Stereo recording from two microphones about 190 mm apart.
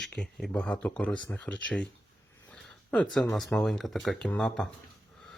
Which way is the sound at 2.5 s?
5° left (ahead or behind).